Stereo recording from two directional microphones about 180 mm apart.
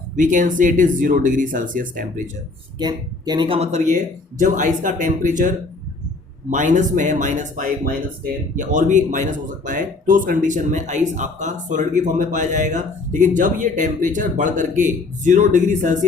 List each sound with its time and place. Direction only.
0.2 s speech: 45° right (ahead or behind)
2.7 s speech: 25° right (ahead or behind); by 16.0 s 45° right (ahead or behind)